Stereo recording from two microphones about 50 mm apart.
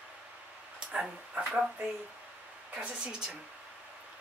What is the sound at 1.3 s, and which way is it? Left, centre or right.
Speech, right.